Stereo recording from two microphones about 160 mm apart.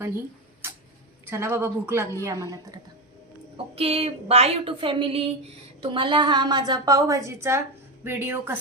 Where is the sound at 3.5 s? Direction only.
35° right (ahead or behind).